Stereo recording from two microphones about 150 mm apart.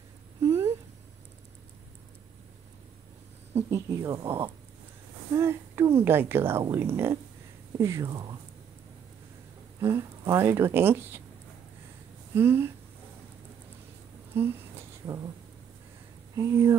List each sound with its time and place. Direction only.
0.4 s a sound: 15° right (ahead or behind)
3.5 s speech: 20° right (ahead or behind)
9.8 s speech: 20° right (ahead or behind)
12.4 s speech: 15° right (ahead or behind)
16.3 s speech: 20° right (ahead or behind)